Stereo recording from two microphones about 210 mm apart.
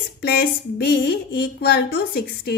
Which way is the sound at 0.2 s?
50° left (ahead or behind).